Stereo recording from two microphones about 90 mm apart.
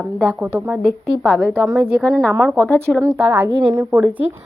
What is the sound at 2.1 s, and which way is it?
Speech, 5° left (ahead or behind).